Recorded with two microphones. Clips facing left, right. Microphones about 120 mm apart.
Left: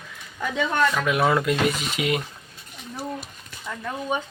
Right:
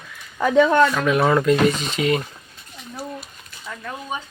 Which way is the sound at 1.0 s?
5° left (ahead or behind).